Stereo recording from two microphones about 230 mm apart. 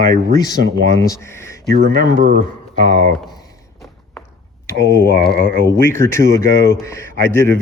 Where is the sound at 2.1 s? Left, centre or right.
Right.